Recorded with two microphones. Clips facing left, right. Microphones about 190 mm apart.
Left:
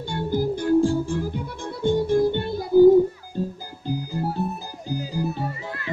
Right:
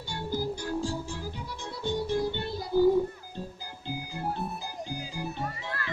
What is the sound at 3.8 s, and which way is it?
Music, 40° left (ahead or behind).